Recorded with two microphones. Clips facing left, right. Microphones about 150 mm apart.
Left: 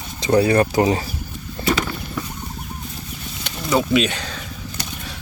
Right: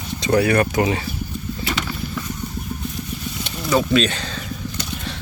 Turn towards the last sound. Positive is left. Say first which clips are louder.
# even
turn(degrees=10)  # may be behind; listen again after turning